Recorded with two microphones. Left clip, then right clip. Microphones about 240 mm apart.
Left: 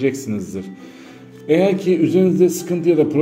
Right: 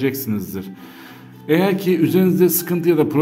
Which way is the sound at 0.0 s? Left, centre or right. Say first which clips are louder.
Left 1 dB; centre.